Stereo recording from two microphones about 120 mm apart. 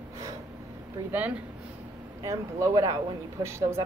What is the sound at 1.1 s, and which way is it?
Speech, 10° right (ahead or behind).